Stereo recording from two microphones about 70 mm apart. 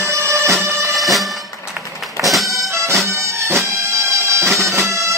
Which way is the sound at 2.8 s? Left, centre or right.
Right.